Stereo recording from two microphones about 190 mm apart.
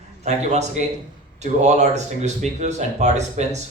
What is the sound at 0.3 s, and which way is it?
Speech, 35° right (ahead or behind).